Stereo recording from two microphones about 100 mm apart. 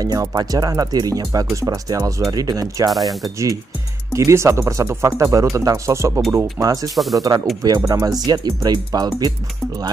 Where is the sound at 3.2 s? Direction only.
35° right (ahead or behind).